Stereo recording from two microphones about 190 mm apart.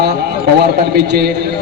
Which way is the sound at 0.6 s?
55° right (ahead or behind).